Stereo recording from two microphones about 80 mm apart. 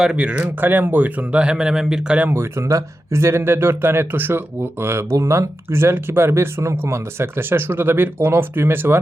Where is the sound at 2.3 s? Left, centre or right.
Right.